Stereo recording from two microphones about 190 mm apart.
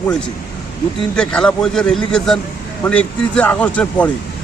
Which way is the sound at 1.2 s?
5° left (ahead or behind).